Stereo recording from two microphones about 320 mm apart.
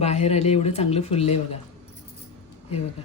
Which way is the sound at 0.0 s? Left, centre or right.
Centre.